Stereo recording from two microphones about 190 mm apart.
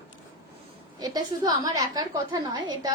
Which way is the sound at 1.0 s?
20° right (ahead or behind).